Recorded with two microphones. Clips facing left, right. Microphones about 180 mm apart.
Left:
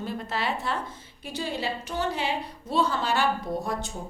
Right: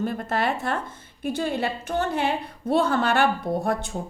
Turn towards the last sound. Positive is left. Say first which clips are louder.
# right 5 dB
turn(degrees=-55)  # may be behind; listen again after turning